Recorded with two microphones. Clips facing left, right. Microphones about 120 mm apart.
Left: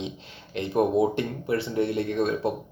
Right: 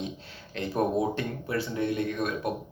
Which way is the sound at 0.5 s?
20° left (ahead or behind).